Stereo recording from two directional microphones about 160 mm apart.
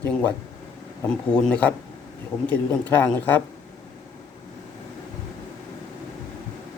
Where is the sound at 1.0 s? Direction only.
5° left (ahead or behind).